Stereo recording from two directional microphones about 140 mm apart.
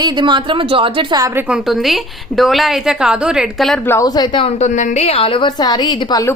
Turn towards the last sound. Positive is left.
turn(degrees=30)  # may be behind; listen again after turning